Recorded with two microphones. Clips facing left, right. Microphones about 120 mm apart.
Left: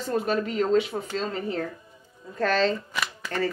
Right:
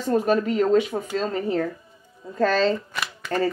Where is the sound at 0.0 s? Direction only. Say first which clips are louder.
Right 5 dB; 45° right (ahead or behind).